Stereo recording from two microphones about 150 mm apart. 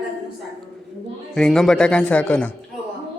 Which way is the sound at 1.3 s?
5° left (ahead or behind).